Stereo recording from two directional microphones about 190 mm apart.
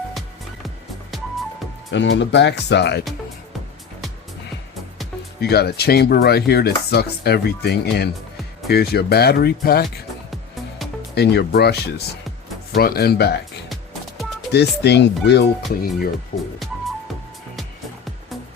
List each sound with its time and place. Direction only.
0.1 s music: centre (ahead or behind)
1.9 s chopping: 70° left (ahead or behind)
5.4 s chopping: 55° left (ahead or behind)
11.1 s chopping: 60° left (ahead or behind)
14.5 s chopping: 60° left (ahead or behind)
16.3 s speech: 50° left (ahead or behind)
17.6 s music: centre (ahead or behind)